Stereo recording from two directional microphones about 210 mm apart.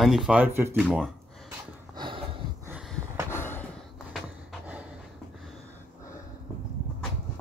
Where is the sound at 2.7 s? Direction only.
Centre (ahead or behind).